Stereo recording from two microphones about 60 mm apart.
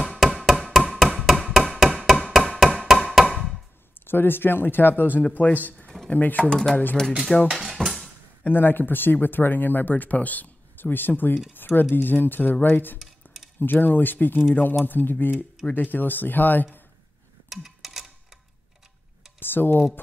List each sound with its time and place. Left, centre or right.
0.2 s a sound: centre
1.5 s hammer: centre
2.9 s a sound: centre
4.0 s speech: left
6.5 s speech: centre
7.4 s cutlery: centre
8.5 s speech: left
17.5 s music: centre
19.4 s speech: left